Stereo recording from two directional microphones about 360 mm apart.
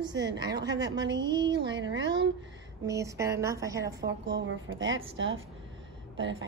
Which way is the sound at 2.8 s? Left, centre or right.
Centre.